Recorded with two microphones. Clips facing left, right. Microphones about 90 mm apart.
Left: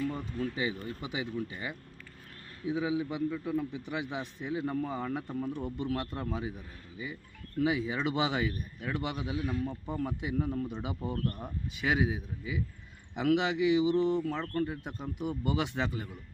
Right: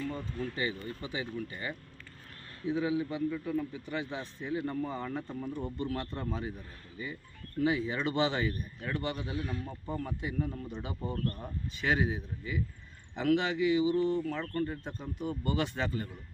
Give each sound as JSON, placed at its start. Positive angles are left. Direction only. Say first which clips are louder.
{"t": 0.0, "sound": "a sound", "louder": "left 3 dB", "side_deg": 15}
{"t": 0.3, "sound": "speech", "louder": "left 2 dB", "side_deg": 5}
{"t": 1.0, "sound": "a man's voice", "louder": "left 2 dB", "side_deg": 15}